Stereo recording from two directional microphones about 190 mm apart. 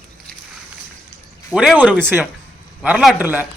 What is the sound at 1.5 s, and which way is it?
Speech, 5° right (ahead or behind).